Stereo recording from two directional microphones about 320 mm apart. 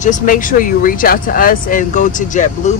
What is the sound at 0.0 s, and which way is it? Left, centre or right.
Speech, left.